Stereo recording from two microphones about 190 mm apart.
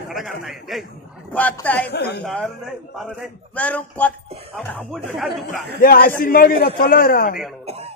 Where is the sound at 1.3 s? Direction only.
10° left (ahead or behind).